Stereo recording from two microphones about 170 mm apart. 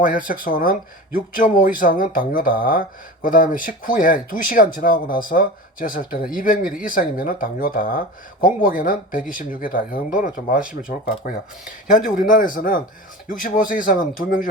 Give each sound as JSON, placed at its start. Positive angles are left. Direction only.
{"t": 0.0, "sound": "speech", "side_deg": 55}